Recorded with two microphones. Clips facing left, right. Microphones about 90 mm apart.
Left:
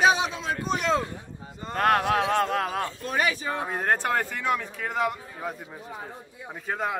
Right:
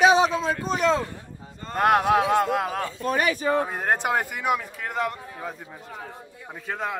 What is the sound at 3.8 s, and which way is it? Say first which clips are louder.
Speech: right 1 dB; 15° right (ahead or behind).